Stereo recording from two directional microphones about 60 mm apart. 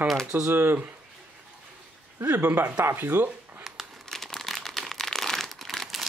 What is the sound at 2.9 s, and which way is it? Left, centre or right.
Speech, right.